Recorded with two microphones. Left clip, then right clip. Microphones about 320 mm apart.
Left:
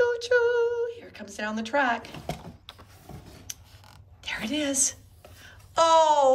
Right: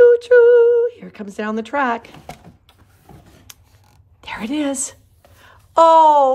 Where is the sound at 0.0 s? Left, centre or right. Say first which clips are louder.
Right 13 dB; centre.